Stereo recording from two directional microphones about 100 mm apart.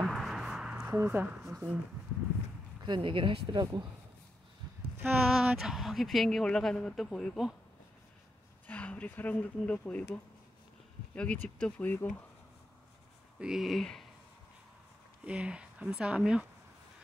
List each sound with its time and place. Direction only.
0.0 s a sound: 5° right (ahead or behind)
0.8 s speech: 20° right (ahead or behind)
2.8 s speech: 55° right (ahead or behind)
5.0 s speech: 10° right (ahead or behind)
8.6 s speech: 15° left (ahead or behind)
13.4 s speech: 5° right (ahead or behind)
15.2 s speech: 10° right (ahead or behind)